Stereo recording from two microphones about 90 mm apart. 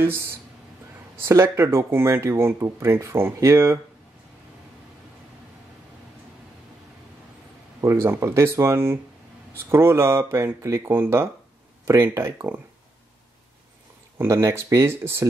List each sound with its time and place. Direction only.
0.0 s speech: 25° right (ahead or behind)
7.8 s speech: 30° right (ahead or behind)
14.1 s speech: 30° right (ahead or behind)